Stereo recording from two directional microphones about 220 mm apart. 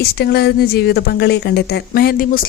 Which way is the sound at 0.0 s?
45° left (ahead or behind).